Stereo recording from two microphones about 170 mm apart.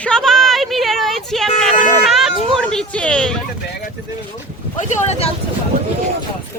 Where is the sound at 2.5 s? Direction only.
5° left (ahead or behind).